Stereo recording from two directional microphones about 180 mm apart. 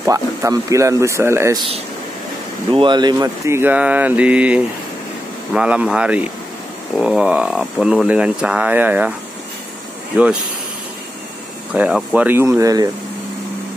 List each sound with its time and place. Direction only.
0.0 s speech: 15° right (ahead or behind)
2.7 s speech: 25° right (ahead or behind); by 9.1 s 10° right (ahead or behind)
10.1 s speech: 10° right (ahead or behind)
11.7 s speech: 5° right (ahead or behind)